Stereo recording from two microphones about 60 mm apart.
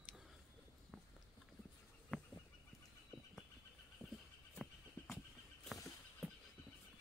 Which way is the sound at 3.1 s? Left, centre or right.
Centre.